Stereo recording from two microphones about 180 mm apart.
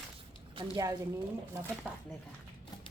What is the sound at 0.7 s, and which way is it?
Speech, 20° right (ahead or behind).